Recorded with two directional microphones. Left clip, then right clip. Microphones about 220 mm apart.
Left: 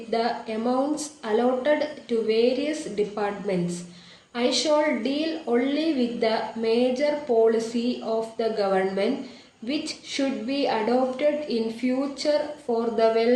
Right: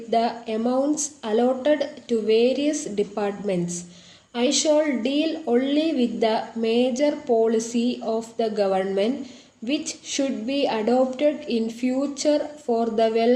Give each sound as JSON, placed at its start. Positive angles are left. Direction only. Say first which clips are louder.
{"t": 0.1, "sound": "a woman's voice", "louder": "right 3 dB", "side_deg": -50}